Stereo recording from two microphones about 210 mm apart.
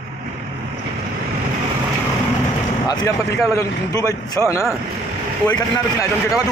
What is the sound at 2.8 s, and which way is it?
A man's voice, 20° left (ahead or behind).